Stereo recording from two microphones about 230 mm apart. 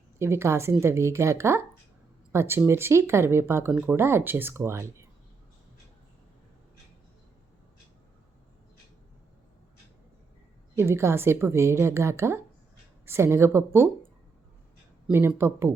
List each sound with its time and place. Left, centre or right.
0.2 s speech: centre
10.8 s speech: centre
15.0 s speech: centre